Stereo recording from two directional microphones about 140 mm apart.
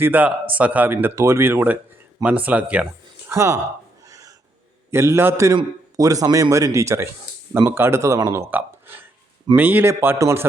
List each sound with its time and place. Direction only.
0.0 s speech: 10° right (ahead or behind)
4.9 s speech: 20° right (ahead or behind)